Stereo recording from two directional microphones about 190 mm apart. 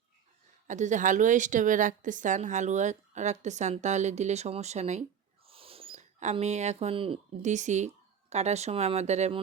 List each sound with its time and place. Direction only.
0.7 s a woman's voice: 40° right (ahead or behind)